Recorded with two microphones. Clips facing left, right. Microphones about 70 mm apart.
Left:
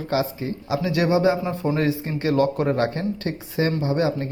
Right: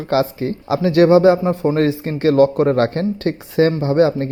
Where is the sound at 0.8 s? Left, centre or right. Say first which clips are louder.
Right 9 dB; right.